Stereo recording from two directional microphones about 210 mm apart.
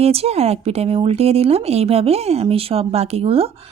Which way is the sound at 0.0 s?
30° right (ahead or behind).